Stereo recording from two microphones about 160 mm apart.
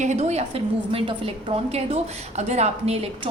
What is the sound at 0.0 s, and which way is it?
A woman's voice, 45° right (ahead or behind).